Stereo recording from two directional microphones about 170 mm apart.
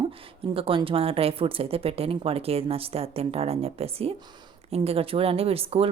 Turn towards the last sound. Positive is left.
turn(degrees=-35)  # may be behind; listen again after turning